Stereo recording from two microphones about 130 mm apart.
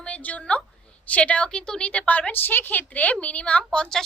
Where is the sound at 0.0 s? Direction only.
10° left (ahead or behind).